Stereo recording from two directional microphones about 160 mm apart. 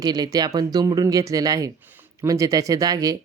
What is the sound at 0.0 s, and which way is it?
Speech, 25° right (ahead or behind).